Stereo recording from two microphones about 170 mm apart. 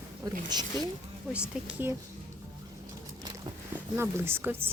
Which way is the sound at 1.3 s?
5° right (ahead or behind).